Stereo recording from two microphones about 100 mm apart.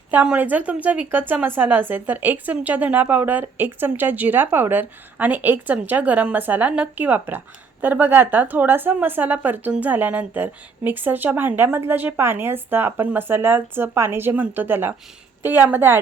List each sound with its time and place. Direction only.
0.1 s a woman's voice: 15° right (ahead or behind)